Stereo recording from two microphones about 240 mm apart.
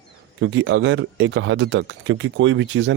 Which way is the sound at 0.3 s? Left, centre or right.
Right.